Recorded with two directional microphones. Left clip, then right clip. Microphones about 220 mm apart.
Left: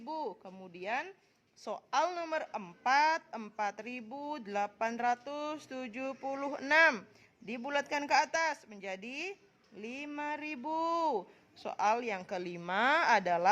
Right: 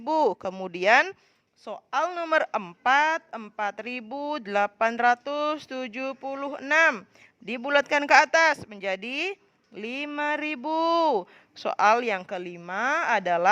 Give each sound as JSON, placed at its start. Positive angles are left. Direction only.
{"t": 0.0, "sound": "speech", "side_deg": -35}
{"t": 1.6, "sound": "a woman's voice", "side_deg": -15}